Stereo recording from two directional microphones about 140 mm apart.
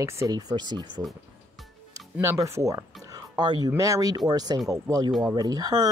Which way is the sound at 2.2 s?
20° right (ahead or behind).